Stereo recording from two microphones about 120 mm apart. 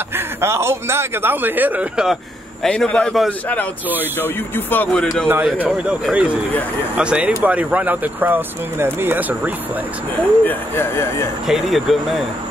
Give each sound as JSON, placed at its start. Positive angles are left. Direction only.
{"t": 0.1, "sound": "speech", "side_deg": -20}
{"t": 2.6, "sound": "a man's voice", "side_deg": 5}
{"t": 5.3, "sound": "speech", "side_deg": -15}
{"t": 10.4, "sound": "speech", "side_deg": 15}
{"t": 11.4, "sound": "speech", "side_deg": 0}